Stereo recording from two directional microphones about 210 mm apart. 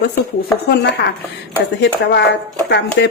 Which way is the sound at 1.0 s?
55° left (ahead or behind).